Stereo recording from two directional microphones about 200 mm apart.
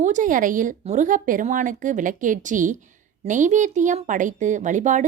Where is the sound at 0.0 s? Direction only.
40° right (ahead or behind).